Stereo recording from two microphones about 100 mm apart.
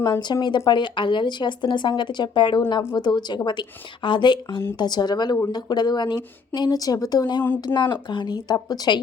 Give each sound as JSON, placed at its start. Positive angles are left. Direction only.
{"t": 0.0, "sound": "speech", "side_deg": 45}